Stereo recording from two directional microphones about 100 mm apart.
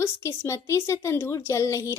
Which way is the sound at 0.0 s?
25° left (ahead or behind).